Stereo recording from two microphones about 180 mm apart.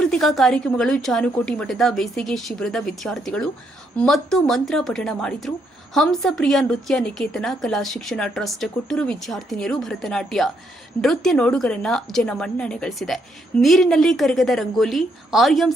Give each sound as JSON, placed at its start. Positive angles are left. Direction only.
{"t": 0.0, "sound": "speech", "side_deg": 5}